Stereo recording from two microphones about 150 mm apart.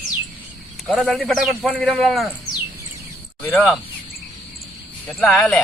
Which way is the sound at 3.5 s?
Centre (ahead or behind).